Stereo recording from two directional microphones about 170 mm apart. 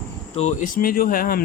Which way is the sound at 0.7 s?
60° left (ahead or behind).